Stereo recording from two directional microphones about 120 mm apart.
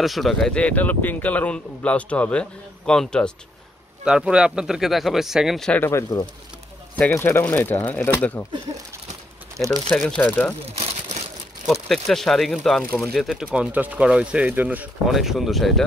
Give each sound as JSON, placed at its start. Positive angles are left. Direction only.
{"t": 0.0, "sound": "speech", "side_deg": 0}
{"t": 4.0, "sound": "speech", "side_deg": -5}
{"t": 5.7, "sound": "speech", "side_deg": 20}
{"t": 9.8, "sound": "speech", "side_deg": 5}
{"t": 11.6, "sound": "speech", "side_deg": 0}
{"t": 15.0, "sound": "speech", "side_deg": 0}